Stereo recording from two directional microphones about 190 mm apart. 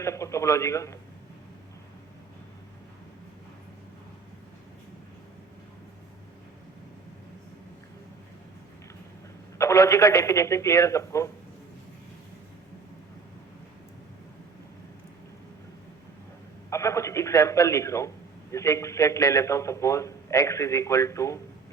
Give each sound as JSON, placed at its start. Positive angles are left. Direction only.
{"t": 0.0, "sound": "a man's voice", "side_deg": 15}
{"t": 9.6, "sound": "a man's voice", "side_deg": 15}
{"t": 16.6, "sound": "a sound", "side_deg": 15}
{"t": 18.5, "sound": "a man's voice", "side_deg": 15}